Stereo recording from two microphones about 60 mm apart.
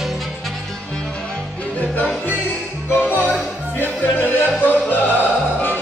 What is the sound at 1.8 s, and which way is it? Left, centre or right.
Music, left.